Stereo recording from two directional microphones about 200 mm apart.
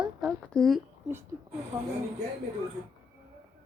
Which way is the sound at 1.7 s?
20° right (ahead or behind).